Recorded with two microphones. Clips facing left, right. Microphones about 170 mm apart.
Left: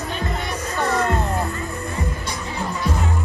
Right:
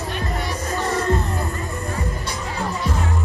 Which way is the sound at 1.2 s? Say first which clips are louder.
Left 2 dB; 35° left (ahead or behind).